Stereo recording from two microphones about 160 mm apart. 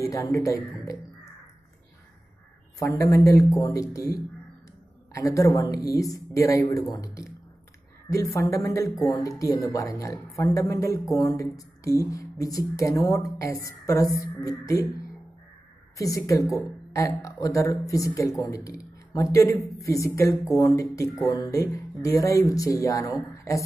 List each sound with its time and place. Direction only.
0.0 s speech: 20° left (ahead or behind)
3.0 s speech: 20° left (ahead or behind)
5.1 s speech: 20° left (ahead or behind)
8.1 s speech: 20° left (ahead or behind)
16.0 s speech: 20° left (ahead or behind)